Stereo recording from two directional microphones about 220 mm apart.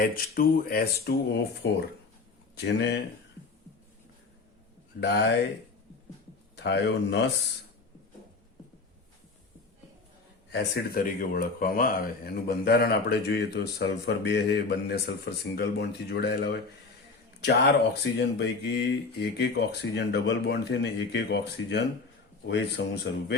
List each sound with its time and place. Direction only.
0.0 s speech: 40° left (ahead or behind)
4.9 s speech: 50° left (ahead or behind)
6.6 s speech: 50° left (ahead or behind)
10.5 s speech: 45° left (ahead or behind)